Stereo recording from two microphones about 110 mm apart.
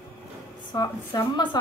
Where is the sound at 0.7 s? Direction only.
35° left (ahead or behind).